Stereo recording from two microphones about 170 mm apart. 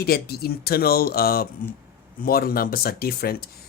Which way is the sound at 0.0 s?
65° left (ahead or behind).